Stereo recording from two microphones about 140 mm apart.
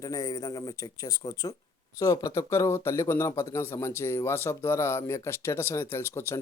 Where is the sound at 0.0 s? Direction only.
25° left (ahead or behind).